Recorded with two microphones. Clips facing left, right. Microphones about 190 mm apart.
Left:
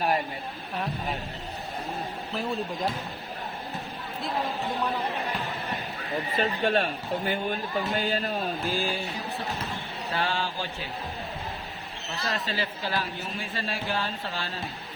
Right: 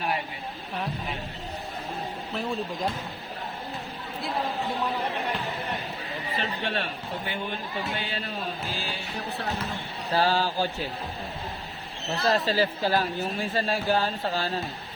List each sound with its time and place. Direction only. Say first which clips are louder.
2.3 s speech: even; centre (ahead or behind)
6.3 s speech: left 5 dB; 45° left (ahead or behind)
10.1 s speech: right 6 dB; 35° right (ahead or behind)
12.2 s speech: right 7 dB; 35° right (ahead or behind)